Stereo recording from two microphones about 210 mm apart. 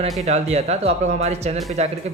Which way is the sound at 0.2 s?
30° right (ahead or behind).